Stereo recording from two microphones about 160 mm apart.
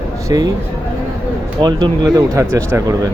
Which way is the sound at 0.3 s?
20° right (ahead or behind).